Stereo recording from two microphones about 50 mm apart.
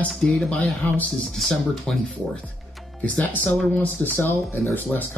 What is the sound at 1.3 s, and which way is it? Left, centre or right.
Speech, centre.